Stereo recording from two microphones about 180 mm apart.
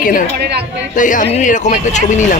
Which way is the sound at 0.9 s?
45° left (ahead or behind).